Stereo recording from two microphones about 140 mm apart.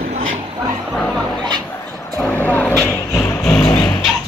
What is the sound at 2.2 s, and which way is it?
Vehicle, 10° left (ahead or behind).